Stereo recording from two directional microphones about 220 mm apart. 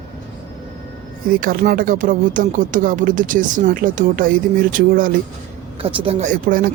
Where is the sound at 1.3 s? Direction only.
40° right (ahead or behind).